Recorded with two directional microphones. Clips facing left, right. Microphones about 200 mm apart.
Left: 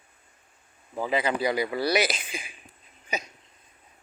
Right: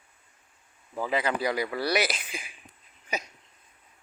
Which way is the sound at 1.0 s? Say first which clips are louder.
Left 2 dB; 20° left (ahead or behind).